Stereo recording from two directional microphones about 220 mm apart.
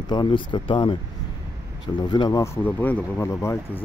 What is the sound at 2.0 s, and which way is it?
Speech, 20° left (ahead or behind).